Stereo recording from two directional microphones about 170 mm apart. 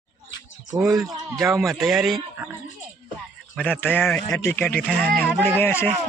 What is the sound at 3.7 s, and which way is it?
Speech, 10° left (ahead or behind).